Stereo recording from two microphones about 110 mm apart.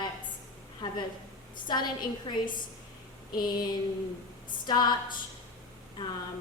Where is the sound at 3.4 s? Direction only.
40° left (ahead or behind).